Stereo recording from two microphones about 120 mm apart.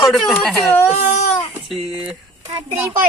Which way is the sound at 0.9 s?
75° left (ahead or behind).